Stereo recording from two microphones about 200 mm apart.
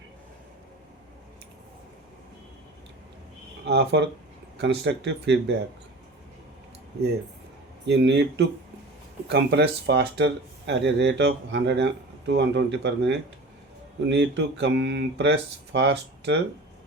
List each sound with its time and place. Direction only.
3.7 s speech: 60° right (ahead or behind)
7.9 s speech: 60° right (ahead or behind)